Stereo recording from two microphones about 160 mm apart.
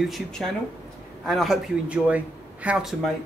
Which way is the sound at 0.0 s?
Centre (ahead or behind).